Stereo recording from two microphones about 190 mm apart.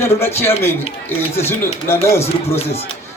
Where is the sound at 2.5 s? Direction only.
35° left (ahead or behind).